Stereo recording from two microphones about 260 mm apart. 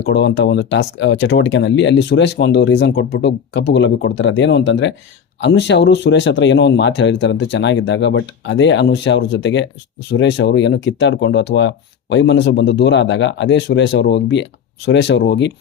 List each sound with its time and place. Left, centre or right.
0.0 s speech: left